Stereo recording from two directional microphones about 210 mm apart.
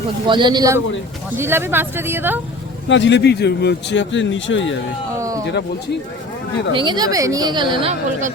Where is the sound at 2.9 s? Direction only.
60° left (ahead or behind).